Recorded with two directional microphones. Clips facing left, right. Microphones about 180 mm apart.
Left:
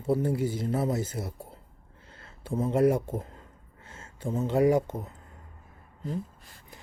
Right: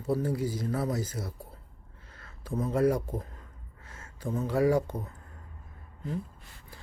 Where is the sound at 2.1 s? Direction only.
25° left (ahead or behind).